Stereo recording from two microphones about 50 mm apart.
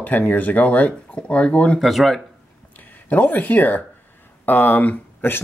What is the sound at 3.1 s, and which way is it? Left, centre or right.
Speech, left.